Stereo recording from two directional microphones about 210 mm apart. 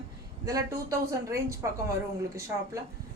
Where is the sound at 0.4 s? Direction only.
15° right (ahead or behind).